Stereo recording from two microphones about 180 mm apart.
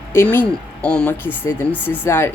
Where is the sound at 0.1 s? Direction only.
10° left (ahead or behind).